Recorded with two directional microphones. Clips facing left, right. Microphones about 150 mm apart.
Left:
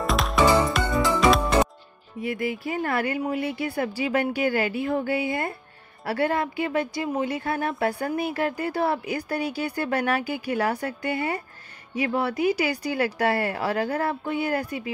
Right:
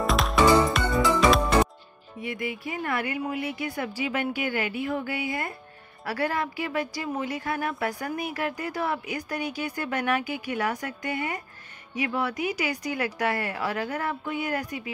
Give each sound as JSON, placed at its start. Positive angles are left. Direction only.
{"t": 0.0, "sound": "music", "side_deg": 0}
{"t": 2.2, "sound": "speech", "side_deg": 35}